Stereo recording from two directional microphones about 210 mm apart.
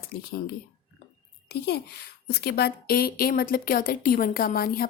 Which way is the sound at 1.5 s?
50° left (ahead or behind).